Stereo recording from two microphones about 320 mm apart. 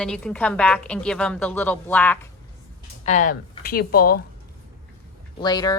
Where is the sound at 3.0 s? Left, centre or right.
Left.